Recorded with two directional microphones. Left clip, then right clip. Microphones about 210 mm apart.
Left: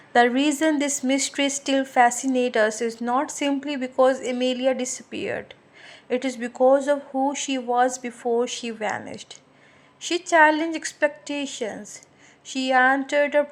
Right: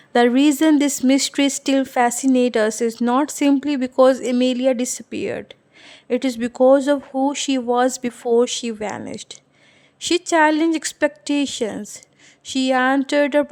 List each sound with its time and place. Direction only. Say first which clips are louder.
0.1 s a woman's voice: right 3 dB; 40° right (ahead or behind)